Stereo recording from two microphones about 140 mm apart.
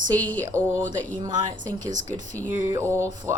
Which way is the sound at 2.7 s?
20° right (ahead or behind).